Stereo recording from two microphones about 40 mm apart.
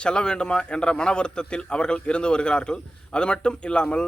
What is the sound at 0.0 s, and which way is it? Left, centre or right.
A man's voice, left.